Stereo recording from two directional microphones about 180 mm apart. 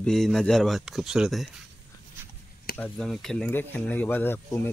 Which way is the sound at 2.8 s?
5° left (ahead or behind).